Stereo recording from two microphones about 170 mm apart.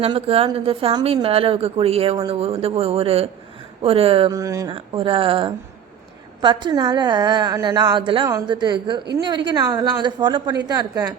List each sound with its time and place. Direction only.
0.0 s speech: 35° right (ahead or behind)
4.3 s a woman's voice: 20° right (ahead or behind)
4.7 s a woman's voice: 30° right (ahead or behind)